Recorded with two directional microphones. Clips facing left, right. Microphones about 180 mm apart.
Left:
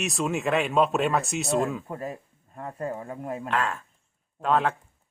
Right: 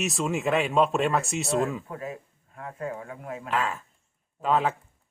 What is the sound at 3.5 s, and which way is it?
Speech, 5° right (ahead or behind).